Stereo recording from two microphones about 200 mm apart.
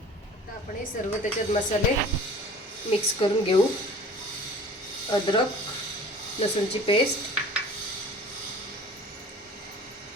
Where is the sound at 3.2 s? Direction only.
25° left (ahead or behind).